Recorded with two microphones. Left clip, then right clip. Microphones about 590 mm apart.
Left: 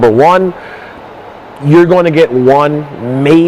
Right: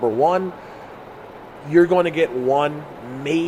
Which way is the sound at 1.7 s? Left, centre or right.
Left.